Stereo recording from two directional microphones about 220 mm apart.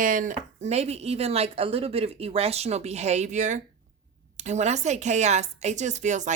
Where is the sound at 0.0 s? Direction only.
35° right (ahead or behind).